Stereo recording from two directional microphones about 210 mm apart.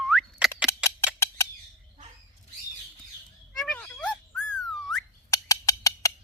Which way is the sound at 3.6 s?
5° left (ahead or behind).